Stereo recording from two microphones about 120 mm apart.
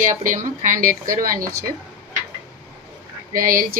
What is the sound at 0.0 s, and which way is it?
Speech, 90° right.